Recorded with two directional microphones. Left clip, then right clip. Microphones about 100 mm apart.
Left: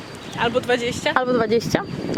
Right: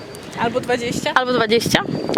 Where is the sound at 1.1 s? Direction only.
50° right (ahead or behind).